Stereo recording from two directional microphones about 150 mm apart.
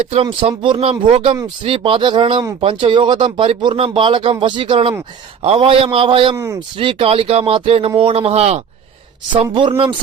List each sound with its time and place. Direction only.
0.1 s speech: 35° right (ahead or behind)
6.3 s speech: 20° right (ahead or behind)
6.7 s speech: 40° right (ahead or behind)
9.3 s speech: 35° right (ahead or behind)